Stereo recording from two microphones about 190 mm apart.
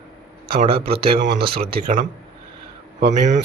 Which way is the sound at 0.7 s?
55° right (ahead or behind).